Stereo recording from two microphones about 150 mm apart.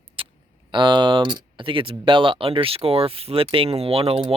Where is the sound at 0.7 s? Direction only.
30° right (ahead or behind).